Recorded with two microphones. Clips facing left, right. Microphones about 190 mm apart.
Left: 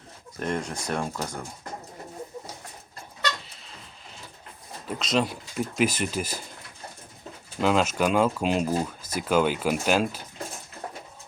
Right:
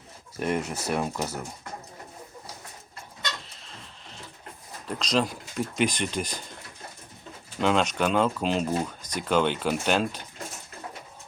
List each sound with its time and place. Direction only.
0.3 s speech: 5° right (ahead or behind)
3.7 s a sound: 5° left (ahead or behind)
4.9 s speech: 5° left (ahead or behind)
7.6 s speech: 5° left (ahead or behind)